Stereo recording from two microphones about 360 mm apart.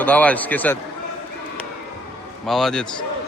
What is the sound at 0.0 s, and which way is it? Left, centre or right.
Speech, centre.